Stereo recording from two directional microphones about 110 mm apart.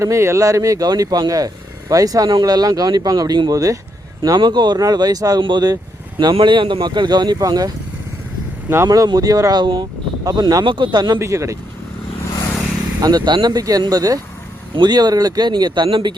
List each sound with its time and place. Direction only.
0.0 s speech: 25° right (ahead or behind)
4.2 s speech: 45° right (ahead or behind)
8.7 s speech: 25° right (ahead or behind)
11.2 s speech: 30° right (ahead or behind)
13.0 s speech: 35° right (ahead or behind)